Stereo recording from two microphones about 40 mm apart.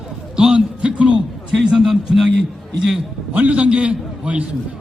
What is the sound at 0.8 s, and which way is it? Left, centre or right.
A man's voice, right.